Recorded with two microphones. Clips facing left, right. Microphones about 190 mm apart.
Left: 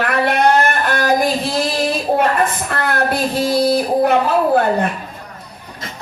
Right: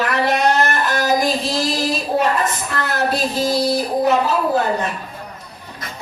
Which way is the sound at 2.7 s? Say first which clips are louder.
Left 2 dB; 60° left (ahead or behind).